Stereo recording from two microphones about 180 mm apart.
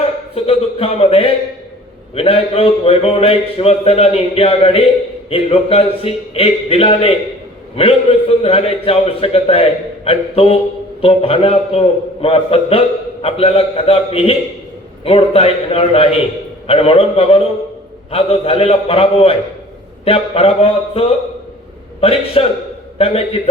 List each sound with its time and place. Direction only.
0.3 s a man's voice: 35° left (ahead or behind)